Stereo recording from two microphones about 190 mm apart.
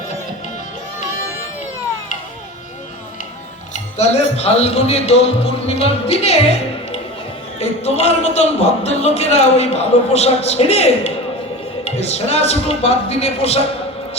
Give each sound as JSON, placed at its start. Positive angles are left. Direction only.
{"t": 3.7, "sound": "speech", "side_deg": 35}